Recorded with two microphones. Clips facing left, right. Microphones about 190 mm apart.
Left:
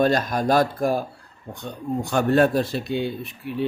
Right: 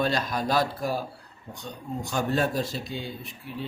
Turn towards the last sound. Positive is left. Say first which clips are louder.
# left 9 dB
turn(degrees=65)  # may be behind; listen again after turning